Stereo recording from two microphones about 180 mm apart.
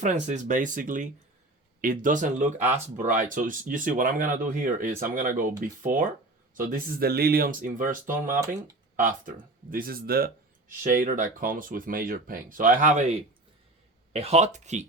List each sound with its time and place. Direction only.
0.0 s speech: 40° right (ahead or behind)